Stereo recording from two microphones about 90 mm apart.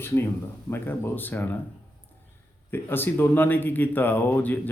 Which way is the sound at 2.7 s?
25° left (ahead or behind).